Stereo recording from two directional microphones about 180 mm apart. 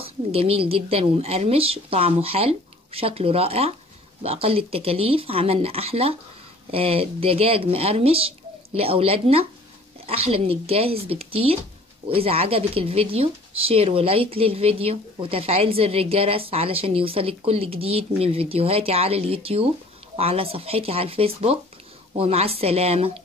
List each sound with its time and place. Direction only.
0.0 s speech: 30° right (ahead or behind)